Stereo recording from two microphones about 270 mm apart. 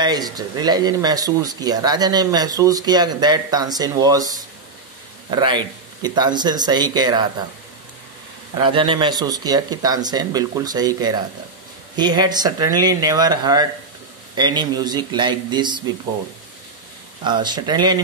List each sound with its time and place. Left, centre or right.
0.0 s speech: centre
8.5 s speech: centre
17.2 s speech: centre